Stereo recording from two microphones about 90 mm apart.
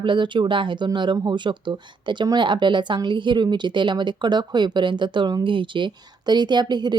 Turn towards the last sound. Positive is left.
turn(degrees=-55)  # may be behind; listen again after turning